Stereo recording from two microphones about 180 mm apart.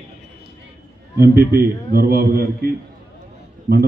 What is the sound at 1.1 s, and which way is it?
A man's voice, 60° right (ahead or behind).